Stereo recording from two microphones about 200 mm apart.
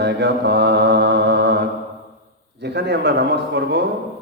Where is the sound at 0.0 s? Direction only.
55° right (ahead or behind).